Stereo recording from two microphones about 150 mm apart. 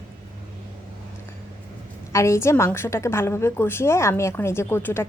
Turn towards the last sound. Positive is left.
turn(degrees=15)  # may be behind; listen again after turning